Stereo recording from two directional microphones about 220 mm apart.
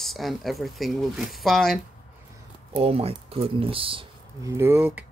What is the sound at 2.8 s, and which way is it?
Speech, 25° right (ahead or behind).